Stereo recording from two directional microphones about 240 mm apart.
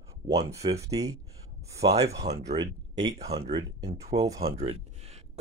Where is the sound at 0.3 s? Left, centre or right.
Right.